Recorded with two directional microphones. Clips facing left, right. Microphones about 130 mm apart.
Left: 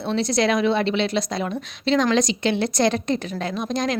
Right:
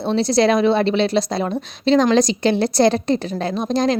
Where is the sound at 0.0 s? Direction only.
35° right (ahead or behind).